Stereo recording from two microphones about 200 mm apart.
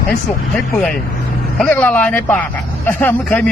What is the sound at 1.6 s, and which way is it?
Speech, 5° left (ahead or behind).